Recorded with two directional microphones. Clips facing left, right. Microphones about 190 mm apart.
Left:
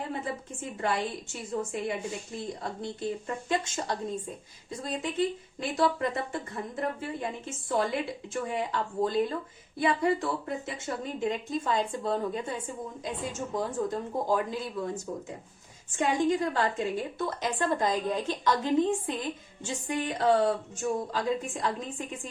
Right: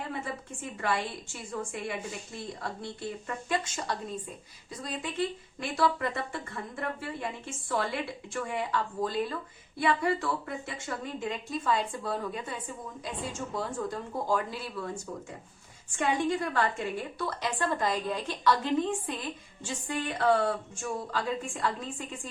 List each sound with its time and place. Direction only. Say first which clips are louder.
0.1 s a woman's voice: left 2 dB; 25° left (ahead or behind)